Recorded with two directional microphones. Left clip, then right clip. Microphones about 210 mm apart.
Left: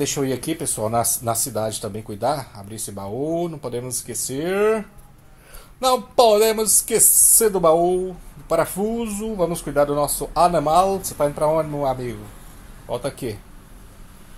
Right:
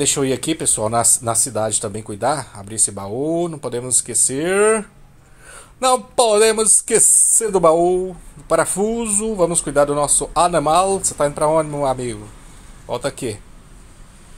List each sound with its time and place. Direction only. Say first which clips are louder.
0.0 s speech: right 4 dB; 15° right (ahead or behind)